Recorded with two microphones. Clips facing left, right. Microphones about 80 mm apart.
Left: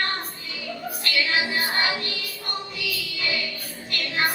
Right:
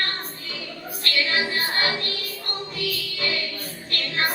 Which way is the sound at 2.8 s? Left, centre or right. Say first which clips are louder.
Right 2 dB; right.